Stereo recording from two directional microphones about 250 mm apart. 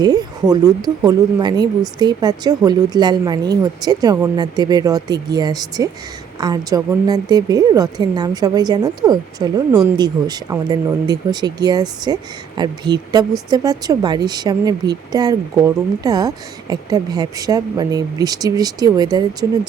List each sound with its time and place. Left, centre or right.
0.0 s speech: centre